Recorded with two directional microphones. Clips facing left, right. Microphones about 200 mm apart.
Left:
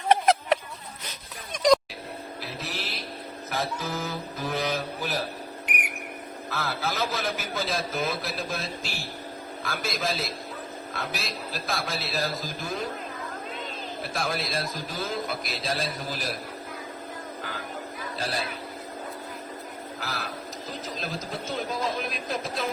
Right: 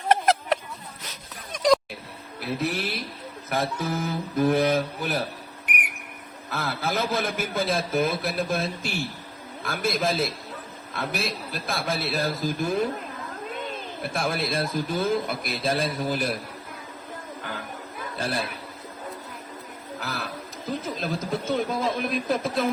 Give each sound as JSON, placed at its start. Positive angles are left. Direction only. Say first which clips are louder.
{"t": 0.1, "sound": "a sound", "louder": "even", "side_deg": 0}
{"t": 2.6, "sound": "a man's voice", "louder": "right 9 dB", "side_deg": -55}
{"t": 6.5, "sound": "a man's voice", "louder": "right 3 dB", "side_deg": -55}
{"t": 14.0, "sound": "a man's voice", "louder": "right 3 dB", "side_deg": -55}
{"t": 20.0, "sound": "a sound", "louder": "right 3 dB", "side_deg": -55}
{"t": 20.8, "sound": "a man's voice", "louder": "right 4 dB", "side_deg": -55}